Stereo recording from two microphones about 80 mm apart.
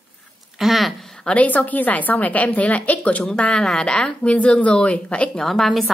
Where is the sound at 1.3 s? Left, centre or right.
Centre.